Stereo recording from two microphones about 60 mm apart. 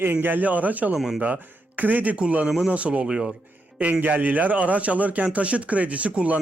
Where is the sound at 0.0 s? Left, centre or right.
Right.